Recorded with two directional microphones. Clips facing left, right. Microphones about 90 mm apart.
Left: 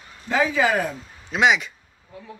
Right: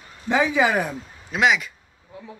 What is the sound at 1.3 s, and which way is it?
Speech, centre (ahead or behind).